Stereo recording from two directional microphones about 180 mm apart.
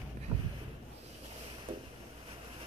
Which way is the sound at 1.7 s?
50° right (ahead or behind).